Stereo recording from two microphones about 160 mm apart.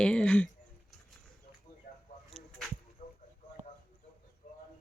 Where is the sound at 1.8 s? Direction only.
55° left (ahead or behind).